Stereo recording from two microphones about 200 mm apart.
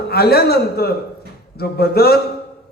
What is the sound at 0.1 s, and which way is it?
A man's voice, 50° left (ahead or behind).